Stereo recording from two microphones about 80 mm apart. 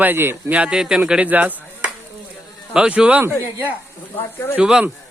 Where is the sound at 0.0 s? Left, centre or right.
Right.